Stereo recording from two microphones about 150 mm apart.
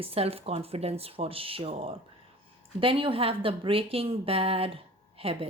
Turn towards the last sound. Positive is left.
turn(degrees=-40)  # may be behind; listen again after turning